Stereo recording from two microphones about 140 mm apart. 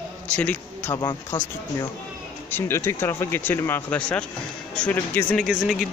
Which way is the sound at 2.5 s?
20° left (ahead or behind).